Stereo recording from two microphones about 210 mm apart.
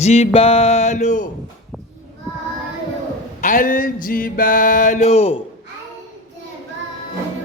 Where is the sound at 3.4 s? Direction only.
40° left (ahead or behind).